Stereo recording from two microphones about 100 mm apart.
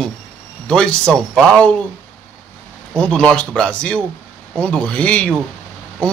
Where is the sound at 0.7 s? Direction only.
10° left (ahead or behind).